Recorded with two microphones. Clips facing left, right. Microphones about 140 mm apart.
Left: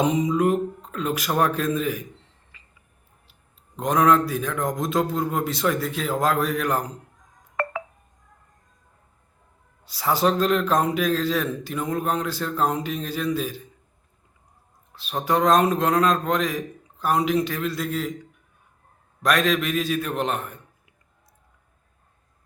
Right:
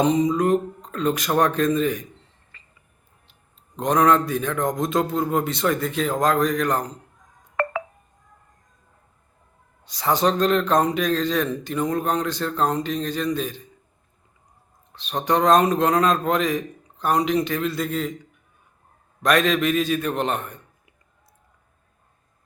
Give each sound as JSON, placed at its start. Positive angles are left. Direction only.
{"t": 0.0, "sound": "a man's voice", "side_deg": 10}
{"t": 2.5, "sound": "a sound", "side_deg": 10}
{"t": 3.8, "sound": "a man's voice", "side_deg": 5}
{"t": 7.5, "sound": "telephone dialing", "side_deg": -90}
{"t": 9.8, "sound": "a man's voice", "side_deg": 5}
{"t": 14.9, "sound": "a man's voice", "side_deg": 5}